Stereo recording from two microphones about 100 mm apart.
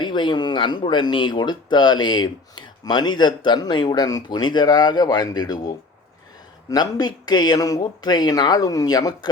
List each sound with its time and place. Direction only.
0.0 s speech: 50° left (ahead or behind)